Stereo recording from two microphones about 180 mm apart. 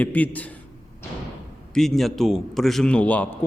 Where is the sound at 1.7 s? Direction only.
Centre (ahead or behind).